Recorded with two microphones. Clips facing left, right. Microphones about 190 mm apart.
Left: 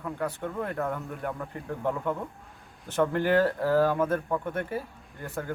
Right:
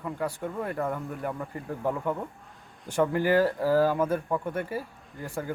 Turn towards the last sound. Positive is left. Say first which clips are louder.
# right 1 dB
turn(degrees=-10)  # may be behind; listen again after turning